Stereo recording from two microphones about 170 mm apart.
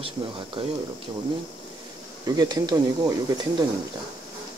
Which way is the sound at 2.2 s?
20° right (ahead or behind).